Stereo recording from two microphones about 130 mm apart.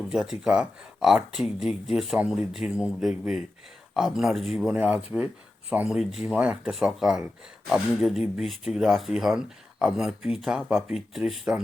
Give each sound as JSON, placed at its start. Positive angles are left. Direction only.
{"t": 0.1, "sound": "speech", "side_deg": -5}